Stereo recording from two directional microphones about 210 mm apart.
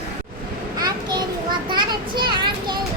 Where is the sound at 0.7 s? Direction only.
20° right (ahead or behind).